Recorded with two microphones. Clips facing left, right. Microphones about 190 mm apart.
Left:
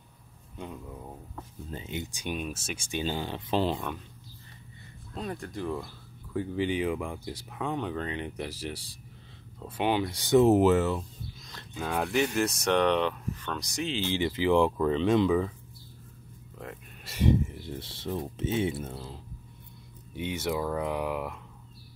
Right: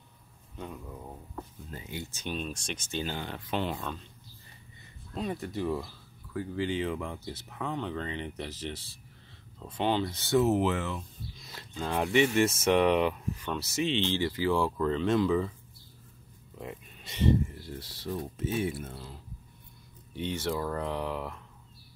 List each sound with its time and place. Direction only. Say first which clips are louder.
1.7 s speech: left 7 dB; 25° left (ahead or behind)
5.1 s speech: right 2 dB; centre (ahead or behind)
6.3 s speech: left 3 dB; 20° left (ahead or behind)
10.4 s speech: left 6 dB; 40° left (ahead or behind)
11.7 s speech: right 1 dB; 5° left (ahead or behind)
14.1 s speech: left 3 dB; 20° left (ahead or behind)
16.5 s a sound: right 1 dB; centre (ahead or behind)
17.5 s speech: left 3 dB; 20° left (ahead or behind)
20.2 s speech: left 1 dB; 10° left (ahead or behind)